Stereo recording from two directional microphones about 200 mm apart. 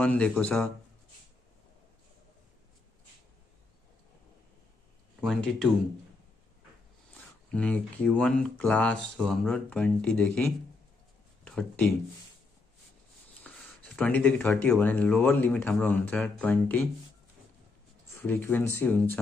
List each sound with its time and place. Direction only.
0.0 s speech: 5° left (ahead or behind)
5.2 s speech: centre (ahead or behind)
7.1 s speech: 5° left (ahead or behind)
13.4 s speech: 5° left (ahead or behind)
18.2 s speech: 10° left (ahead or behind)